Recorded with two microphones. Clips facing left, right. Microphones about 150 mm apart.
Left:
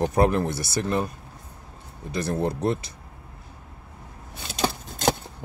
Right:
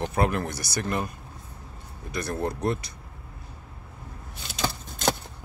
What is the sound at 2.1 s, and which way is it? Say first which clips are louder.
Speech: left 3 dB; 25° left (ahead or behind).